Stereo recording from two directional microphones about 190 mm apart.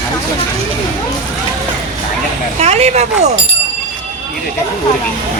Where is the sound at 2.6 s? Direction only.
35° right (ahead or behind).